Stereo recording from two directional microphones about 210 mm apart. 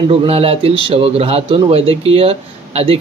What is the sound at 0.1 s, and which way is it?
A man's voice, 30° right (ahead or behind).